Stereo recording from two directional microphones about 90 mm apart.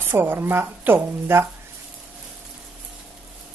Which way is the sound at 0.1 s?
25° right (ahead or behind).